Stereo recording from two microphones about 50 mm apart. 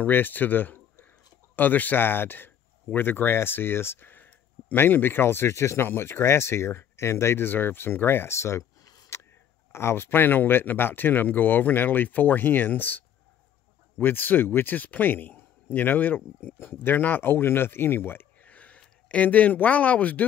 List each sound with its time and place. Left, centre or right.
0.0 s speech: left
5.9 s speech: left
9.1 s a sound: left
9.7 s speech: left
14.0 s a man's voice: left
18.4 s a sound: left
19.0 s speech: left